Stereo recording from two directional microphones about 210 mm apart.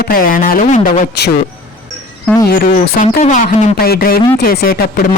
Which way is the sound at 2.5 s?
45° left (ahead or behind).